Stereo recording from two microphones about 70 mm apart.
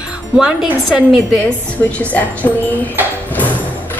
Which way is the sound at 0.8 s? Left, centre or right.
Centre.